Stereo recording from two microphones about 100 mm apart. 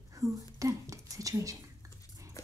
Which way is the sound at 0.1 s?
35° right (ahead or behind).